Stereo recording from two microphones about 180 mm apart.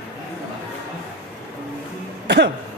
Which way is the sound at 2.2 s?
70° right (ahead or behind).